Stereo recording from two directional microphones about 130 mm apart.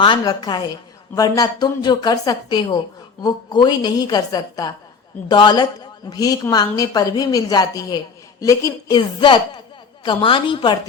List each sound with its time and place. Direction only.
0.0 s a woman's voice: 35° left (ahead or behind)